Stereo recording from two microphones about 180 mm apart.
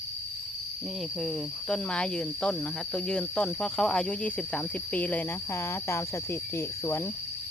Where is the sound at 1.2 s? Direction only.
5° left (ahead or behind).